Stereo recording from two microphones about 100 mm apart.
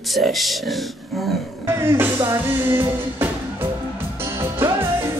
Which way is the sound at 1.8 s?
25° right (ahead or behind).